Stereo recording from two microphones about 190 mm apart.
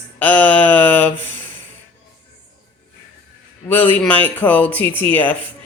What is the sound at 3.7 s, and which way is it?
Speech, 10° left (ahead or behind).